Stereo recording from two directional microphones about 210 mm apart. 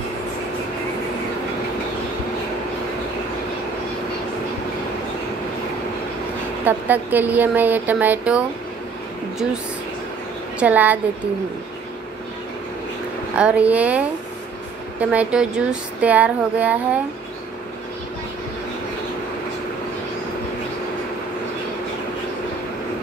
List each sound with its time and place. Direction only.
6.6 s speech: 10° right (ahead or behind)
10.6 s speech: 5° right (ahead or behind)
13.4 s speech: 5° right (ahead or behind)